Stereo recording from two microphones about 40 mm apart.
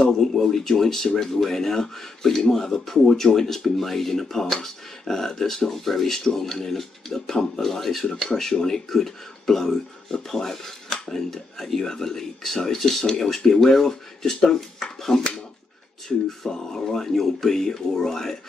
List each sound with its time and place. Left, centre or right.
0.0 s speech: centre
16.3 s speech: centre